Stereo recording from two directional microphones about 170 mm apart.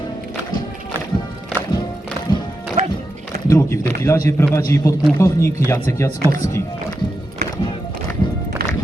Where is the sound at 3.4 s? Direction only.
15° left (ahead or behind).